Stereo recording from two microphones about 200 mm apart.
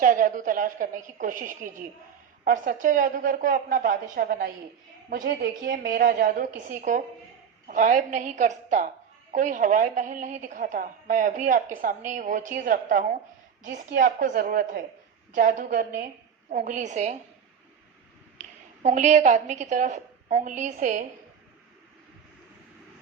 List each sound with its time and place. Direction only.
0.0 s a woman's voice: 40° right (ahead or behind)
18.3 s a woman's voice: 35° right (ahead or behind)